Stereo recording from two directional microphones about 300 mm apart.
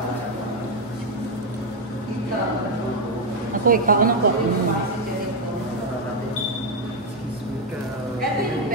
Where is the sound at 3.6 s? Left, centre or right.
Right.